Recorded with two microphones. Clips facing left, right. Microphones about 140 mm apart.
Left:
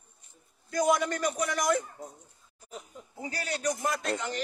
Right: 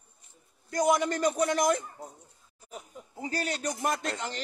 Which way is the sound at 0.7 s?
20° right (ahead or behind).